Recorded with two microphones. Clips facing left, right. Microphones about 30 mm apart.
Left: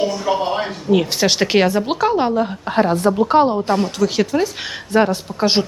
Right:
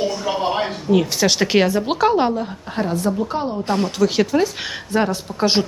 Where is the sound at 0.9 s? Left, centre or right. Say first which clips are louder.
Left 1 dB; centre.